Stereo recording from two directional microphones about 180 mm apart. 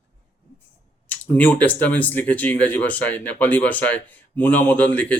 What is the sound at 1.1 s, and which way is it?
Speech, 10° left (ahead or behind).